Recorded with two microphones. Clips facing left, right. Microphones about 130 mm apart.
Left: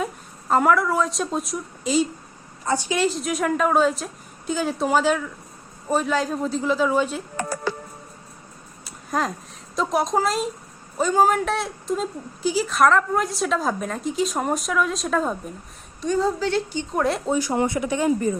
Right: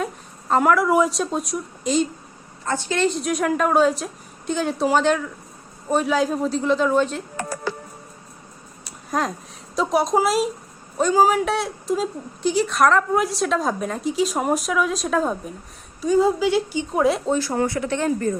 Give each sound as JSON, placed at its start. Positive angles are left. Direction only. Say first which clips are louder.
{"t": 0.0, "sound": "a sound", "louder": "right 1 dB", "side_deg": 0}
{"t": 0.9, "sound": "a woman's voice", "louder": "right 5 dB", "side_deg": -15}
{"t": 1.1, "sound": "speech", "louder": "right 1 dB", "side_deg": 0}
{"t": 8.8, "sound": "a sound", "louder": "right 1 dB", "side_deg": 0}
{"t": 9.7, "sound": "a woman's voice", "louder": "right 2 dB", "side_deg": 0}
{"t": 17.3, "sound": "speech", "louder": "even", "side_deg": 15}